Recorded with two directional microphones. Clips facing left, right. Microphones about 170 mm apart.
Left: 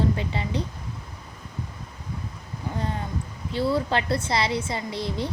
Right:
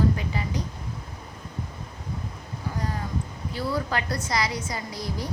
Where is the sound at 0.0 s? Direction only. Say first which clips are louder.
Even; 25° left (ahead or behind).